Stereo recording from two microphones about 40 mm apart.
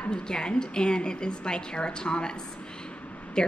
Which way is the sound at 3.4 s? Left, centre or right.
Left.